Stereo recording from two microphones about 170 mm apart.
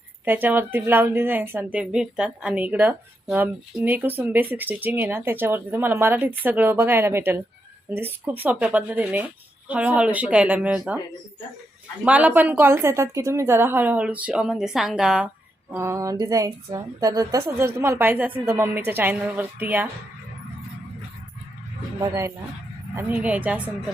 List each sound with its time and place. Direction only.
0.3 s speech: 10° right (ahead or behind)
12.0 s speech: 10° right (ahead or behind)
15.7 s a woman's voice: 15° right (ahead or behind)
22.0 s speech: 15° right (ahead or behind)